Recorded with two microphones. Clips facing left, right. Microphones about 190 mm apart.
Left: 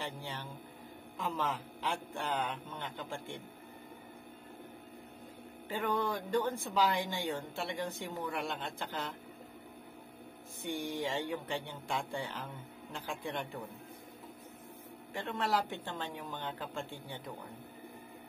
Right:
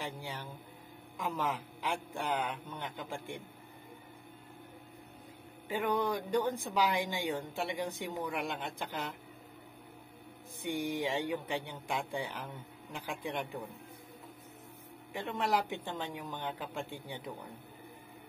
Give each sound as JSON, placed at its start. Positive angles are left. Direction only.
{"t": 0.0, "sound": "speech", "side_deg": -15}
{"t": 5.7, "sound": "speech", "side_deg": -15}
{"t": 10.6, "sound": "speech", "side_deg": -15}
{"t": 15.1, "sound": "speech", "side_deg": -15}